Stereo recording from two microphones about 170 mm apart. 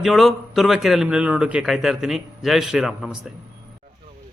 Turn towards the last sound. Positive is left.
turn(degrees=-5)  # may be behind; listen again after turning